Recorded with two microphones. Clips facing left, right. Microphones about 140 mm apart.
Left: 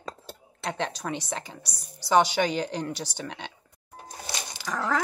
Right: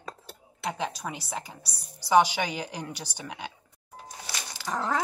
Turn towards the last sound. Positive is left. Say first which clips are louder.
# left 1 dB
turn(degrees=-25)  # may be behind; listen again after turning